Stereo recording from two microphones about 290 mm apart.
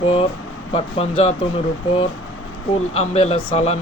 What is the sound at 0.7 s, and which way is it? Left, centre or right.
Speech, left.